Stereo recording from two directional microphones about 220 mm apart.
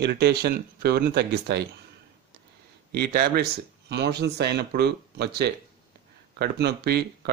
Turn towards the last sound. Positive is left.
turn(degrees=-50)  # may be behind; listen again after turning